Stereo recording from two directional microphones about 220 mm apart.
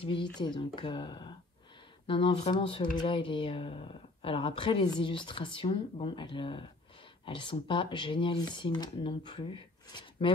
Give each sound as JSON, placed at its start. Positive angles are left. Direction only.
{"t": 0.0, "sound": "speech", "side_deg": 25}